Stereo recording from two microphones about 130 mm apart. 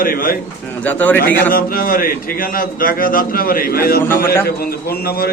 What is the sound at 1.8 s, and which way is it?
A man's voice, 90° left.